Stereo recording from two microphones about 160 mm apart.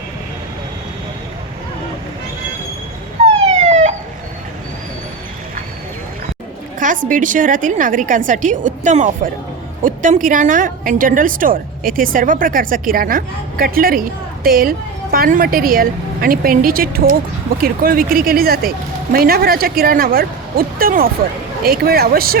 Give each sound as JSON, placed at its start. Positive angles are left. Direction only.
{"t": 3.2, "sound": "police car", "side_deg": -45}
{"t": 6.7, "sound": "a woman's voice", "side_deg": -55}